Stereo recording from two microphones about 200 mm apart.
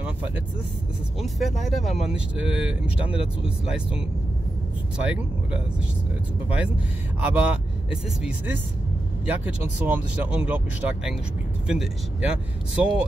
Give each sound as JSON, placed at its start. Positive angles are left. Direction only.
{"t": 1.2, "sound": "speech", "side_deg": 0}
{"t": 3.1, "sound": "speech", "side_deg": 25}
{"t": 4.9, "sound": "speech", "side_deg": -5}
{"t": 7.2, "sound": "speech", "side_deg": -10}